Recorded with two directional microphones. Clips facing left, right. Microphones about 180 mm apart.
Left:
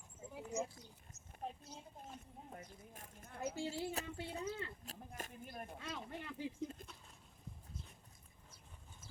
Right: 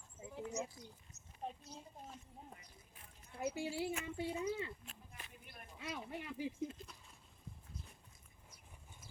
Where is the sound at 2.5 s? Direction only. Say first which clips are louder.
Left 9 dB; 50° left (ahead or behind).